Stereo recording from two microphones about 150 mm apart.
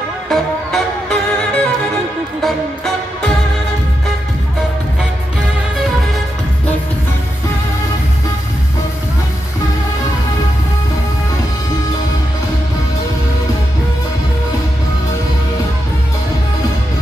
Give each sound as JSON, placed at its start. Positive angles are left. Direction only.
{"t": 0.3, "sound": "music", "side_deg": 0}